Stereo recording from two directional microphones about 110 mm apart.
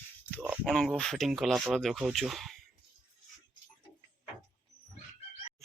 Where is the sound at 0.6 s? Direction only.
10° left (ahead or behind).